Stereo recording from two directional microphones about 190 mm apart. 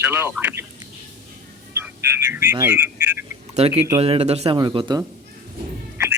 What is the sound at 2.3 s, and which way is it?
Speech, 15° right (ahead or behind).